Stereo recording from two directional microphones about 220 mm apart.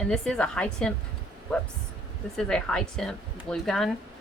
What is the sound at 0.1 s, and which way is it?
Speech, 5° left (ahead or behind).